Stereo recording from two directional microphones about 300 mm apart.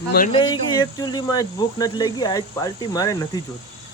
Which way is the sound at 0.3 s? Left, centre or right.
Centre.